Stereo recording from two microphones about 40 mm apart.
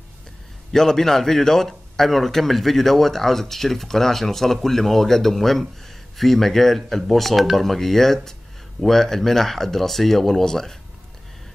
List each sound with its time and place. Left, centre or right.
0.7 s speech: centre